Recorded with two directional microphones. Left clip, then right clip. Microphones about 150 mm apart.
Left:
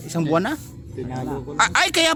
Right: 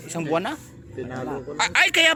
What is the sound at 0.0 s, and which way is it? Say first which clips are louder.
Speech: left 3 dB; 35° left (ahead or behind).